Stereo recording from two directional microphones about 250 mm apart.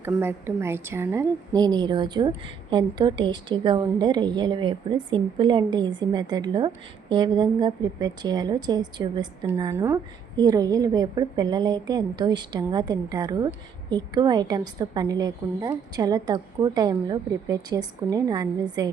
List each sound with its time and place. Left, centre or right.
0.0 s a woman's voice: centre